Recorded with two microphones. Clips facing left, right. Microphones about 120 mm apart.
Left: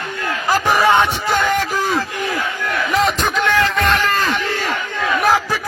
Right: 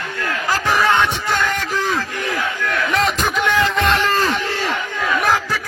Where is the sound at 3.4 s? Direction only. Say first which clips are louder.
Even; 15° right (ahead or behind).